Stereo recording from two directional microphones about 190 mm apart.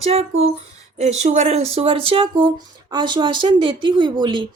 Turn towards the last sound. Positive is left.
turn(degrees=-25)  # may be behind; listen again after turning